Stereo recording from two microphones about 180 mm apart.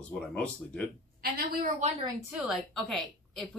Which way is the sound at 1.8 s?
40° right (ahead or behind).